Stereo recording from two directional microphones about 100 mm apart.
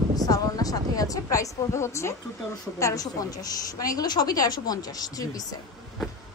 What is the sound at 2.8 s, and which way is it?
A woman's voice, 35° left (ahead or behind).